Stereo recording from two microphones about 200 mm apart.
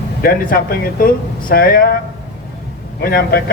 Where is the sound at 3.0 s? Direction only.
50° left (ahead or behind).